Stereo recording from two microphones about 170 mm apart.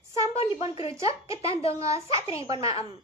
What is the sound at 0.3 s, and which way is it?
Speech, 35° left (ahead or behind).